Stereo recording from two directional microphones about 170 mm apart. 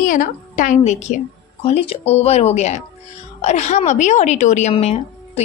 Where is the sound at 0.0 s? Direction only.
50° left (ahead or behind).